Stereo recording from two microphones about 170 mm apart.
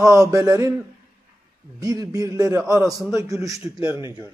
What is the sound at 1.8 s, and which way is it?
A man's voice, 20° right (ahead or behind).